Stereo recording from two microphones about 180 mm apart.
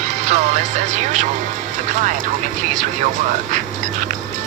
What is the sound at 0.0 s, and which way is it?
Music, 40° right (ahead or behind).